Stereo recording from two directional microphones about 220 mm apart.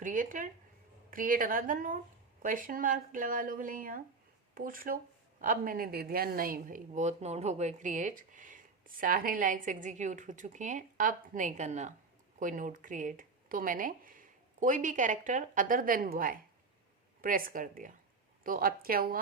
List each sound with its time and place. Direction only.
0.0 s a woman's voice: 35° right (ahead or behind)